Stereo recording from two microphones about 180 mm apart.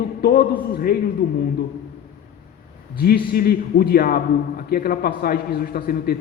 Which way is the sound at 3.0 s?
60° left (ahead or behind).